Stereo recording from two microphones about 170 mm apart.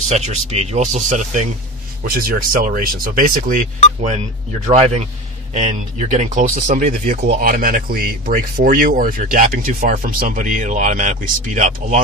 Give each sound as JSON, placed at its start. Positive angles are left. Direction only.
{"t": 0.1, "sound": "speech", "side_deg": -40}
{"t": 2.0, "sound": "speech", "side_deg": -55}
{"t": 7.2, "sound": "speech", "side_deg": -55}